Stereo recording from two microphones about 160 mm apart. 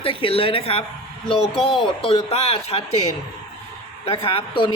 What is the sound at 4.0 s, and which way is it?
Speech, 35° left (ahead or behind).